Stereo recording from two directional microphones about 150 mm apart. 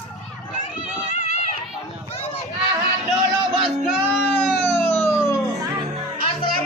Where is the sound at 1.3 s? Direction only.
50° left (ahead or behind).